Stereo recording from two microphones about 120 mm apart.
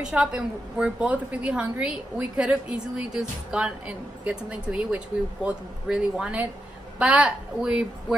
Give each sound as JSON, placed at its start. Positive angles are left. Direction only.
{"t": 0.0, "sound": "a woman's voice", "side_deg": -5}